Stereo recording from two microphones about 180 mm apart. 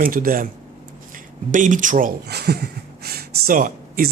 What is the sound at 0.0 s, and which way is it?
Speech, 50° right (ahead or behind).